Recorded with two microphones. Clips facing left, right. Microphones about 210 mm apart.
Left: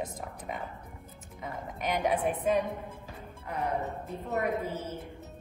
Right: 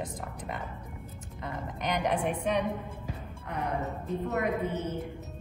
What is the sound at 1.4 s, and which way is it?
Speech, 5° left (ahead or behind).